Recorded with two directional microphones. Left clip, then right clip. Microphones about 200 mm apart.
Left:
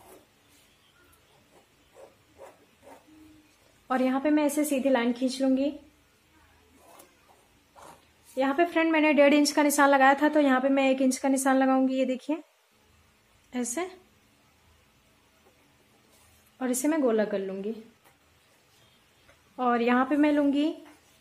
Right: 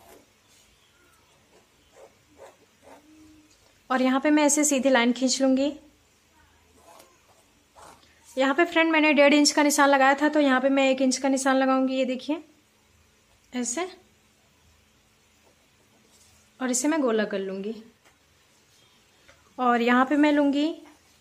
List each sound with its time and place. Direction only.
3.8 s a woman's voice: 10° right (ahead or behind)
8.4 s a woman's voice: 15° right (ahead or behind)
13.5 s speech: 5° right (ahead or behind)
16.5 s a woman's voice: 10° right (ahead or behind)
19.5 s a woman's voice: 15° right (ahead or behind)